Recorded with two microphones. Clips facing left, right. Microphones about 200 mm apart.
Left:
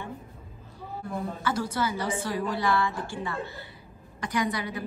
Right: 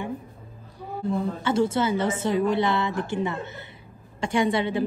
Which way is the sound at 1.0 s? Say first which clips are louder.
Right 6 dB; 25° right (ahead or behind).